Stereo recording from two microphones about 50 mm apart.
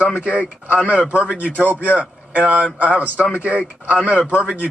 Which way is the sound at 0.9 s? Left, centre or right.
Right.